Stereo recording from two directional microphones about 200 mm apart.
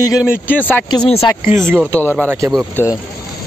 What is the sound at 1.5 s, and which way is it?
Speech, 10° right (ahead or behind).